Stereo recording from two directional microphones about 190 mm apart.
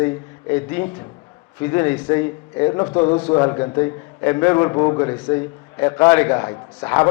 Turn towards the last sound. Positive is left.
turn(degrees=20)  # may be behind; listen again after turning